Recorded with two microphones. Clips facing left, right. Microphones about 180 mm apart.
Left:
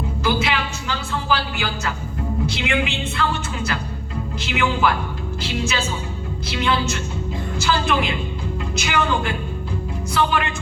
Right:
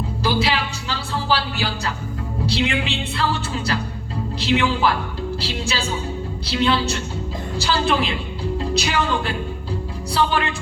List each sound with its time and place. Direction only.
0.2 s a sound: 35° right (ahead or behind)
2.5 s music: 35° right (ahead or behind)
4.4 s speech: 35° right (ahead or behind)
5.4 s music: 35° right (ahead or behind)
7.5 s a woman's voice: 35° right (ahead or behind)
8.7 s music: 35° right (ahead or behind)